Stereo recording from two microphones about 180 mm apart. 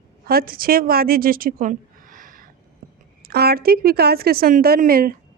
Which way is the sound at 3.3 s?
60° right (ahead or behind).